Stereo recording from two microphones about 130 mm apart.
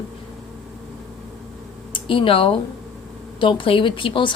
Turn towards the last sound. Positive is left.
turn(degrees=40)  # may be behind; listen again after turning